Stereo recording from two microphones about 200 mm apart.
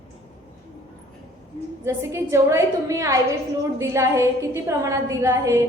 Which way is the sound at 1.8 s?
15° right (ahead or behind).